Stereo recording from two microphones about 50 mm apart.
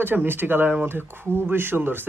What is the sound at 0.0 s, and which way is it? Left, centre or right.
Speech, right.